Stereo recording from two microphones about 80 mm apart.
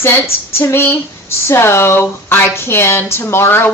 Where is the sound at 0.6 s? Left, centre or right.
Left.